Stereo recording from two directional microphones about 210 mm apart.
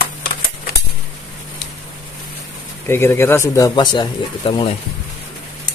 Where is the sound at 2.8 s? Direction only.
10° left (ahead or behind).